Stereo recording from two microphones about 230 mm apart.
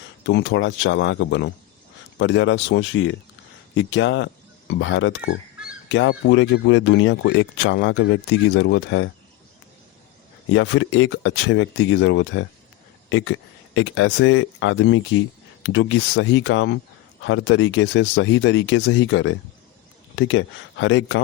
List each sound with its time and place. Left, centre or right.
0.3 s speech: left
10.5 s speech: left